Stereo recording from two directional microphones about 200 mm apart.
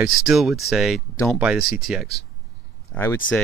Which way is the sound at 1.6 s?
50° left (ahead or behind).